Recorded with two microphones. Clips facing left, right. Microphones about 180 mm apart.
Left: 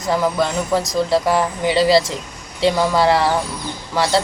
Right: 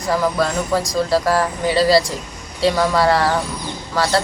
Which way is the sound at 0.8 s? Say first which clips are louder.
Left 1 dB; 25° left (ahead or behind).